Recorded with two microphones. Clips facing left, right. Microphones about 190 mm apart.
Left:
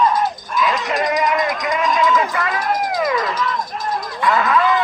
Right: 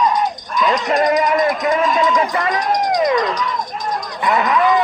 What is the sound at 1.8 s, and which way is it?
Speech, centre (ahead or behind).